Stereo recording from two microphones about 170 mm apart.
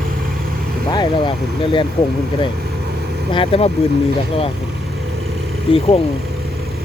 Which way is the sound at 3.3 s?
35° left (ahead or behind).